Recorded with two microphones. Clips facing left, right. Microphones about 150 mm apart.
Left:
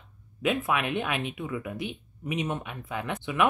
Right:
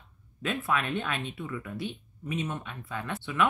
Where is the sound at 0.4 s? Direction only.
15° left (ahead or behind).